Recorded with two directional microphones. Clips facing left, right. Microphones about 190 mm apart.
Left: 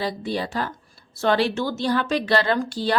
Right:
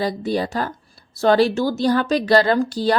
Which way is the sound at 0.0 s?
45° right (ahead or behind).